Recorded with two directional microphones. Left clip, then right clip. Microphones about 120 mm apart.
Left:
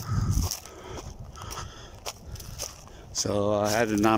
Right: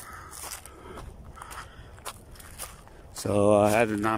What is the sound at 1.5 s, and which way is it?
Biting, 25° left (ahead or behind).